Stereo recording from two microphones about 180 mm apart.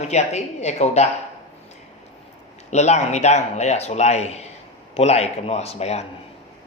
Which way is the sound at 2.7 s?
40° left (ahead or behind).